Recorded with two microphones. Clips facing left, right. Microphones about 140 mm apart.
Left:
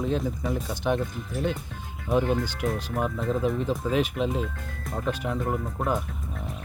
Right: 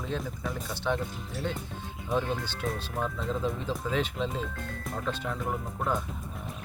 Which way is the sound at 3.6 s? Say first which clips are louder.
Left 5 dB; 10° left (ahead or behind).